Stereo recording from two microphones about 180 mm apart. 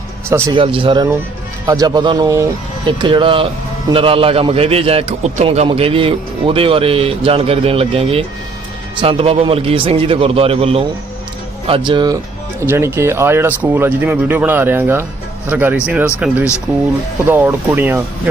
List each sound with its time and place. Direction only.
0.3 s speech: 15° right (ahead or behind)
0.5 s speech: 30° right (ahead or behind)
11.9 s speech: 25° right (ahead or behind)
12.5 s speech: 15° right (ahead or behind)